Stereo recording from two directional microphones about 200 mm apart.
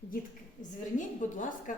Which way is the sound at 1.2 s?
40° left (ahead or behind).